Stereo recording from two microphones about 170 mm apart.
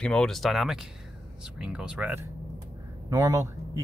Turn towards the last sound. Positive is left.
turn(degrees=-20)  # may be behind; listen again after turning